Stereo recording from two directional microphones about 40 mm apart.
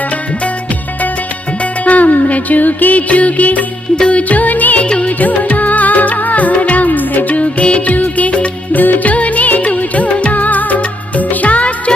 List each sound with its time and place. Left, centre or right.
1.8 s music: left
3.9 s music: left
4.2 s music: left
4.9 s music: left
5.2 s music: left
8.7 s music of bollywood: left
11.2 s music: left